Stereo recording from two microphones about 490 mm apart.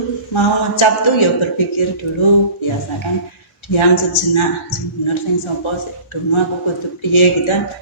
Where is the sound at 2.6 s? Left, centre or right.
Left.